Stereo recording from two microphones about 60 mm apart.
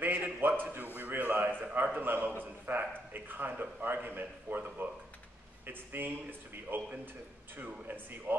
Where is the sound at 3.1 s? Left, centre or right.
Right.